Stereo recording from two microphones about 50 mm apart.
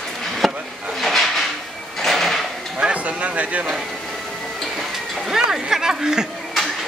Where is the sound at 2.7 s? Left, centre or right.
Right.